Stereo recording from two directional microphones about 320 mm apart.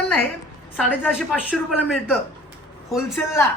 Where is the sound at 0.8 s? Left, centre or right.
Centre.